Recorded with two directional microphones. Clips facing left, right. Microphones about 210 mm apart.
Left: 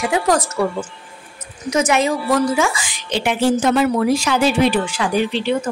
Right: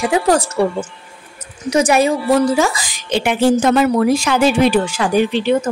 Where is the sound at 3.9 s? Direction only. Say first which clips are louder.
Right 2 dB; 50° right (ahead or behind).